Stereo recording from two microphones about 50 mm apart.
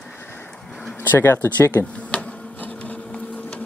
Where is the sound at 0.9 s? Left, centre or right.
Left.